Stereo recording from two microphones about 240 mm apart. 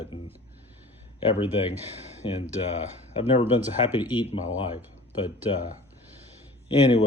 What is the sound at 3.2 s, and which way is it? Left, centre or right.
Speech, left.